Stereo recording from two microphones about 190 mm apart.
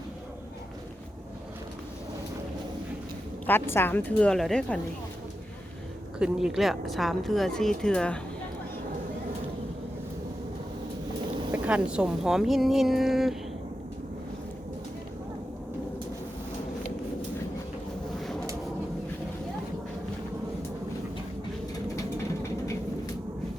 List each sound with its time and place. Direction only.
3.4 s a woman's voice: 10° left (ahead or behind)
6.1 s a woman's voice: 5° right (ahead or behind)
11.5 s a woman's voice: 5° right (ahead or behind)
22.4 s vehicle: 15° left (ahead or behind)